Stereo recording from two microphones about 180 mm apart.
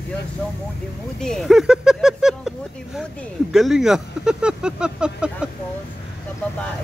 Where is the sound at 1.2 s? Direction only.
Centre (ahead or behind).